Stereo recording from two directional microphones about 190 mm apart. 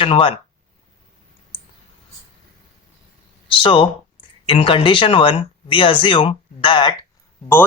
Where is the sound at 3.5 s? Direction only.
25° left (ahead or behind).